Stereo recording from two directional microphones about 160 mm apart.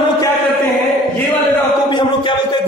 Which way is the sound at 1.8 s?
30° left (ahead or behind).